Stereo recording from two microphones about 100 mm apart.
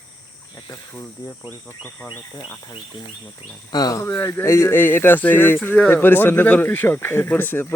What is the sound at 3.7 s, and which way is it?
Speech, 40° left (ahead or behind).